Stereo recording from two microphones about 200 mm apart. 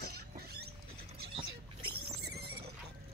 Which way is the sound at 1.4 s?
90° right.